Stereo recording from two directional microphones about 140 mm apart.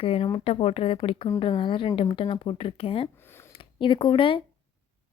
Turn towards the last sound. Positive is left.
turn(degrees=40)  # may be behind; listen again after turning